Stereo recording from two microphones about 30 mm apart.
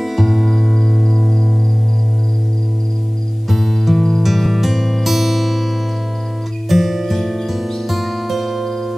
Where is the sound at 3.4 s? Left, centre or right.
Centre.